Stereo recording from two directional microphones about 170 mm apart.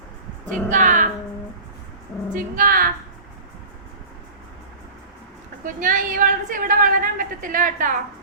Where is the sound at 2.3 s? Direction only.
55° right (ahead or behind).